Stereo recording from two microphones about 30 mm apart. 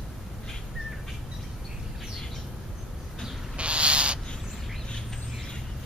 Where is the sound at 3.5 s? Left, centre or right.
Right.